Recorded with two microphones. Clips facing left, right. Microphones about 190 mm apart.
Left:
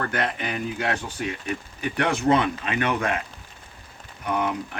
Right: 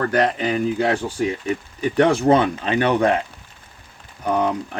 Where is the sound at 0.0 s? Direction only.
35° right (ahead or behind).